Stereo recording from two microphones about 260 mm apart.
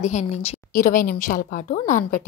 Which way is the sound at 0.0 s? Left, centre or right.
Left.